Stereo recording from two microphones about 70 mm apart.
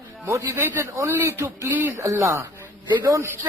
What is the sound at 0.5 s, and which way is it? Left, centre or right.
A man's voice, right.